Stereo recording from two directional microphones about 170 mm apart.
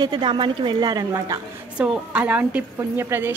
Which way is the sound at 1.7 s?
10° right (ahead or behind).